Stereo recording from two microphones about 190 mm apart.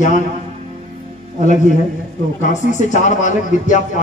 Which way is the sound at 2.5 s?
40° left (ahead or behind).